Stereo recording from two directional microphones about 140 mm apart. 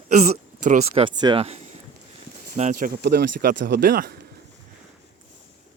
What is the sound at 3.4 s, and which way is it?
Speech, 90° right.